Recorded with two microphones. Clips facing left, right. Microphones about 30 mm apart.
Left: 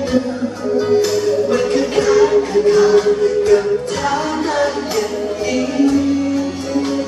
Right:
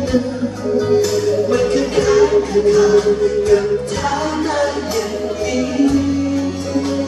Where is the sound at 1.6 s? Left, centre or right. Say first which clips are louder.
Even; centre.